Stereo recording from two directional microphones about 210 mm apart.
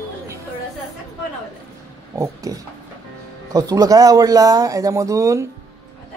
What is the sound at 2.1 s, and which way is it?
Speech, 15° right (ahead or behind).